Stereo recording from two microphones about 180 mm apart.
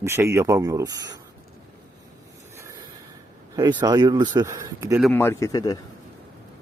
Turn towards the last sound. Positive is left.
turn(degrees=20)  # may be behind; listen again after turning